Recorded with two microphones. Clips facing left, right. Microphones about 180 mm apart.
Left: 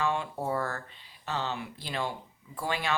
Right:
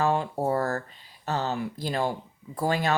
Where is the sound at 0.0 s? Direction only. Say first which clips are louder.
Right 6 dB; 40° right (ahead or behind).